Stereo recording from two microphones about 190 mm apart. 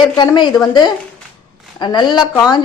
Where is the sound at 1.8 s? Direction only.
25° left (ahead or behind).